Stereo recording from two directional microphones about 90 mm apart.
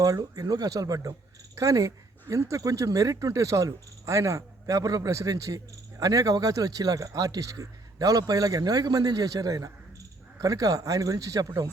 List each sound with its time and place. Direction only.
0.0 s speech: 40° right (ahead or behind)